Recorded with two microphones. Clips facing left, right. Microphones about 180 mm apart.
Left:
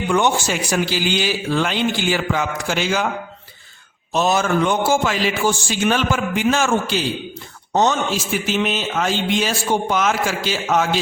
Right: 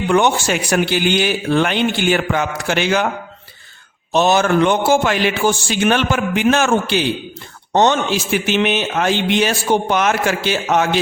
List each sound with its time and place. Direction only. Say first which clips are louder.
0.1 s a man's voice: right 3 dB; 60° right (ahead or behind)
4.1 s a man's voice: right 4 dB; 70° right (ahead or behind)
7.7 s speech: right 3 dB; 75° right (ahead or behind)